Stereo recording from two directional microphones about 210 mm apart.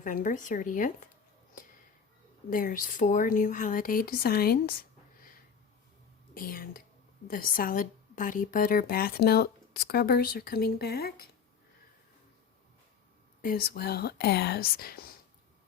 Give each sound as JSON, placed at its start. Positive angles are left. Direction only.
{"t": 0.0, "sound": "speech", "side_deg": 40}
{"t": 2.5, "sound": "speech", "side_deg": 40}
{"t": 6.3, "sound": "a woman's voice", "side_deg": 45}
{"t": 13.4, "sound": "a woman's voice", "side_deg": 45}